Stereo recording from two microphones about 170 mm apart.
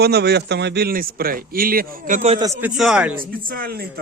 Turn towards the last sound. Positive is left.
turn(degrees=-60)  # may be behind; listen again after turning